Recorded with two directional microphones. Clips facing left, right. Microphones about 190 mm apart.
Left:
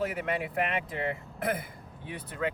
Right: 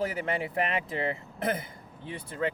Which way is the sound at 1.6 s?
30° right (ahead or behind).